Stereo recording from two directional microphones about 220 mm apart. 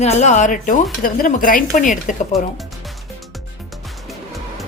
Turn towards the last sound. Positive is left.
turn(degrees=0)  # may be behind; listen again after turning